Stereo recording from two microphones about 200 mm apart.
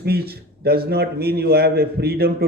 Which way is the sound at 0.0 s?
50° right (ahead or behind).